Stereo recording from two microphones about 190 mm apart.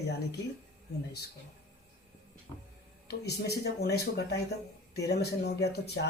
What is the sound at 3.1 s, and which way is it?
Speech, 60° left (ahead or behind).